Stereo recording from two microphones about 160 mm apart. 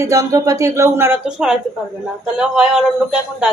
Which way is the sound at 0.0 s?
20° right (ahead or behind).